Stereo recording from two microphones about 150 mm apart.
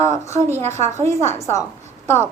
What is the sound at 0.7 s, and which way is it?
Speech, 50° right (ahead or behind).